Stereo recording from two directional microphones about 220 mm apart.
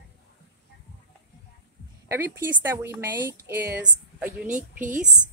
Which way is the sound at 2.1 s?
10° right (ahead or behind).